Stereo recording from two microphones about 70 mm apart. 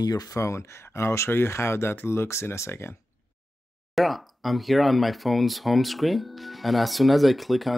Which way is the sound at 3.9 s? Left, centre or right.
Centre.